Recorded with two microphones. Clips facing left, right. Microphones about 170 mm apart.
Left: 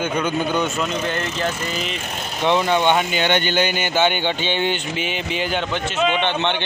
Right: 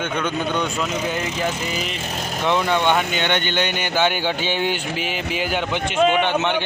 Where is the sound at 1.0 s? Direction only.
10° right (ahead or behind).